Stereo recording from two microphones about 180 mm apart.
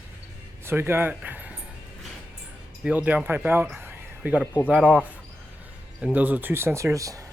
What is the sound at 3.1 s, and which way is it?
Speech, 10° right (ahead or behind).